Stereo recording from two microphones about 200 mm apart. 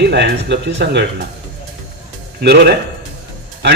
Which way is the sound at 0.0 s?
55° right (ahead or behind).